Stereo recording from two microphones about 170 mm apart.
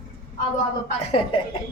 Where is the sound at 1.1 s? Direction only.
30° left (ahead or behind).